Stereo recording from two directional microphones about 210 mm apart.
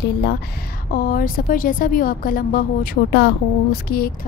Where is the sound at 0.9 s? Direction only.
45° left (ahead or behind).